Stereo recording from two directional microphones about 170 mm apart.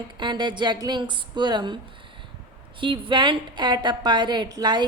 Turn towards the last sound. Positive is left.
turn(degrees=-25)  # may be behind; listen again after turning